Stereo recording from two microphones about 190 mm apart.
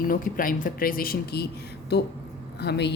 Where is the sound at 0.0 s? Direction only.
45° left (ahead or behind).